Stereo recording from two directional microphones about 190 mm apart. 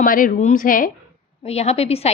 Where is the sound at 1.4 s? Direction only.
35° left (ahead or behind).